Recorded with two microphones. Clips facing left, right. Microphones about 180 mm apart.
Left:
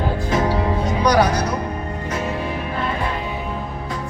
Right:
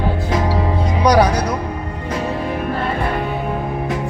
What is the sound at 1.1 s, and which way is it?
Music, 30° right (ahead or behind).